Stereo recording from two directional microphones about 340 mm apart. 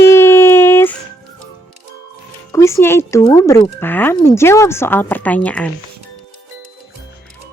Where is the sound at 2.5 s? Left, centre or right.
Centre.